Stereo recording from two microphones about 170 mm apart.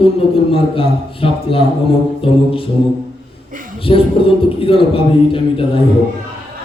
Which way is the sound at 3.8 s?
35° left (ahead or behind).